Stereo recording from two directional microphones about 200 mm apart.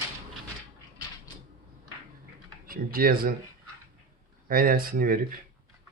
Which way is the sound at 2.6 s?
45° right (ahead or behind).